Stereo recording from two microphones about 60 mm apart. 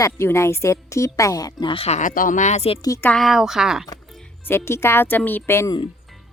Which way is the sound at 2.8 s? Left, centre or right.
Left.